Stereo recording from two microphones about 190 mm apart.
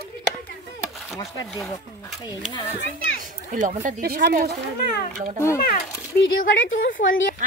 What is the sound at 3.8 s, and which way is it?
Speech, 50° right (ahead or behind).